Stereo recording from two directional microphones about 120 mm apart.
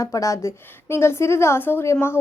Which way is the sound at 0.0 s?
30° left (ahead or behind).